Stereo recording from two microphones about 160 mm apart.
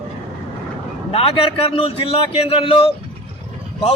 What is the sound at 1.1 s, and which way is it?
A man's voice, 35° left (ahead or behind).